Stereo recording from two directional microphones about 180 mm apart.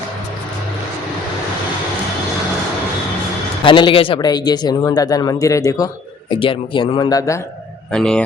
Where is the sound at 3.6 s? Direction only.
25° left (ahead or behind).